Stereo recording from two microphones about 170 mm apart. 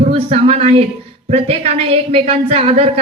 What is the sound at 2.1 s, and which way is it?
Speech, 35° right (ahead or behind).